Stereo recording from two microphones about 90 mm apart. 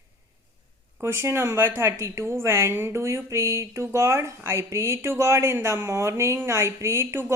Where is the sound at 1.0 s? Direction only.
25° right (ahead or behind).